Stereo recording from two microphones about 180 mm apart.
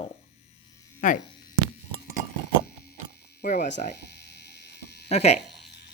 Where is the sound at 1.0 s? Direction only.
45° left (ahead or behind).